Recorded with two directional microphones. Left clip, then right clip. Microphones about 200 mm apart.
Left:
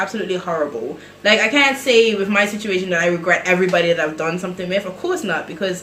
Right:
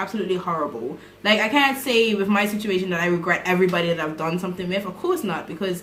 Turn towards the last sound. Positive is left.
turn(degrees=-20)  # may be behind; listen again after turning